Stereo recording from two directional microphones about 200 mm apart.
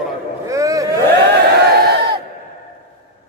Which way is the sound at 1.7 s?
50° right (ahead or behind).